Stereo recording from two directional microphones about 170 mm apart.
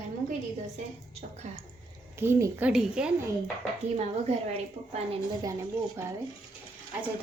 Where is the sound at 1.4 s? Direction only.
45° right (ahead or behind).